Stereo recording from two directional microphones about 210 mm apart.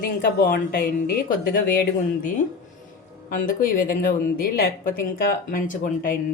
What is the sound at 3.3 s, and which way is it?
A woman's voice, 40° left (ahead or behind).